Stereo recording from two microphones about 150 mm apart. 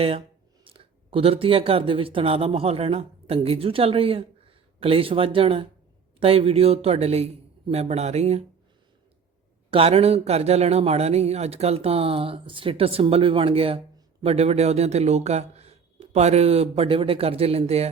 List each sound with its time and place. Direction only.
0.6 s a man's voice: 35° right (ahead or behind)
9.7 s a man's voice: 40° right (ahead or behind)